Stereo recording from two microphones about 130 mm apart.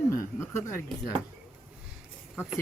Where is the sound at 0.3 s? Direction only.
20° left (ahead or behind).